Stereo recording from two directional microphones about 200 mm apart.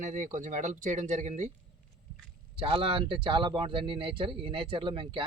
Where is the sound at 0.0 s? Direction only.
35° right (ahead or behind).